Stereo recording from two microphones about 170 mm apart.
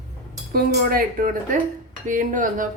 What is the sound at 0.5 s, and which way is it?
Speech, 60° right (ahead or behind).